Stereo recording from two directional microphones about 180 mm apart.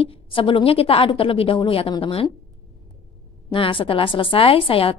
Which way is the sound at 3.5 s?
30° left (ahead or behind).